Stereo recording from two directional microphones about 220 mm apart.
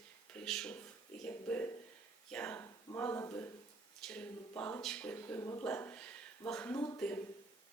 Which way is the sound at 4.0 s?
5° left (ahead or behind).